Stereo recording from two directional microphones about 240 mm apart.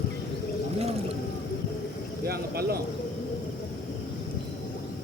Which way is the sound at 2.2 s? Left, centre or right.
Right.